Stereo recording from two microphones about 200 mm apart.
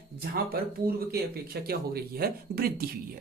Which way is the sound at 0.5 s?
50° right (ahead or behind).